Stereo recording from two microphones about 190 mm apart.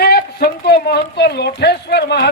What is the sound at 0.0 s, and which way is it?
Speech, 55° left (ahead or behind).